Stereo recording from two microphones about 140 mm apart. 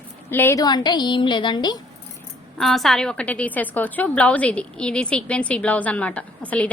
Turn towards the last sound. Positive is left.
turn(degrees=10)  # may be behind; listen again after turning